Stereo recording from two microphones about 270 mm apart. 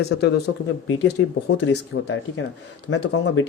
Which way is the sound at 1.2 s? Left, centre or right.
Left.